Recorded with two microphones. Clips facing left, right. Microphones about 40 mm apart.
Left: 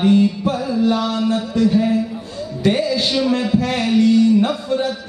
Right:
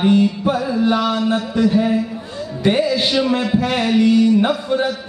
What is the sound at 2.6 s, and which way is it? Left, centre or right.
A man's voice, right.